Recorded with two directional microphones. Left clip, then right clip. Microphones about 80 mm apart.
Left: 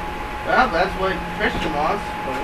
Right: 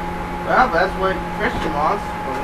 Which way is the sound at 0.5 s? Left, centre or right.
Left.